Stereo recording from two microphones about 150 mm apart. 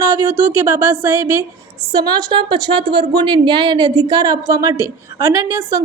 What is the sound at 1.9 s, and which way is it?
A woman's voice, 30° right (ahead or behind).